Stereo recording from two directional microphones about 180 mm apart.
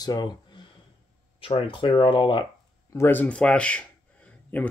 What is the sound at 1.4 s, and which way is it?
Speech, 30° left (ahead or behind).